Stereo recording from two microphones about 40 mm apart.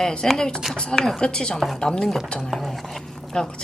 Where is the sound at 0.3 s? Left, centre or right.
Centre.